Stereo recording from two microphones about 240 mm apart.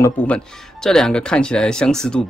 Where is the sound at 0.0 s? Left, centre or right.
Centre.